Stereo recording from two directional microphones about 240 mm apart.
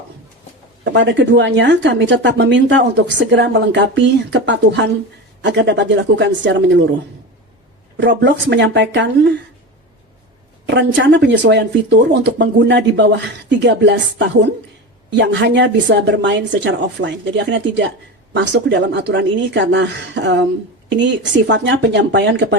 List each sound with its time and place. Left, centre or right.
0.9 s a woman's voice: right
7.9 s a woman's voice: right
10.7 s a woman's voice: right